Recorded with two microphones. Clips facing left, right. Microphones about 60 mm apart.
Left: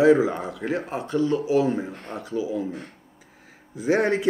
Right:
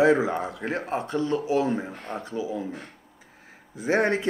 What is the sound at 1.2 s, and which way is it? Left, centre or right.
Speech, right.